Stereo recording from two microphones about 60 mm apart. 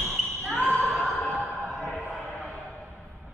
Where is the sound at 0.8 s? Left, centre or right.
Centre.